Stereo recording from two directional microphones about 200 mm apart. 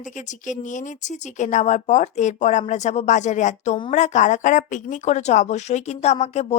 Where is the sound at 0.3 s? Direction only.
40° left (ahead or behind).